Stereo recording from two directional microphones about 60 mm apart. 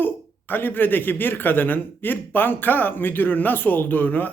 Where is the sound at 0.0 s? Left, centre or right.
Left.